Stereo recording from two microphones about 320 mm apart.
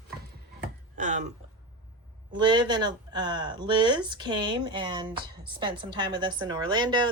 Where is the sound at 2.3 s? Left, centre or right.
Centre.